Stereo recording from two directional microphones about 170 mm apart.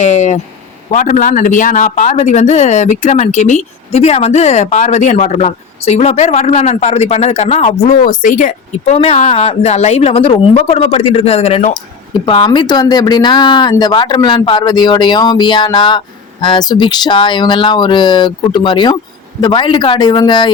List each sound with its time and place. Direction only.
0.0 s speech: 45° left (ahead or behind); by 20.5 s 25° left (ahead or behind)